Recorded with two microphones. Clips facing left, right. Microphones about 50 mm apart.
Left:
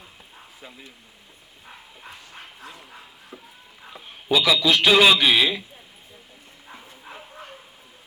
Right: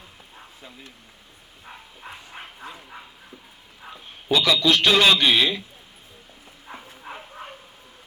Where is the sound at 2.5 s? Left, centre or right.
Centre.